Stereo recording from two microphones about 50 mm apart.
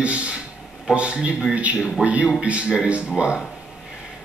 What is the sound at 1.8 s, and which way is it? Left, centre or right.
Speech, centre.